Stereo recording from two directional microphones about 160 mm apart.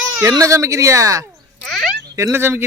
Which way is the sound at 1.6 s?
Centre (ahead or behind).